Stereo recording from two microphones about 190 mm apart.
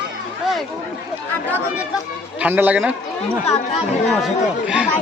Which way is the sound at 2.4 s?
10° right (ahead or behind).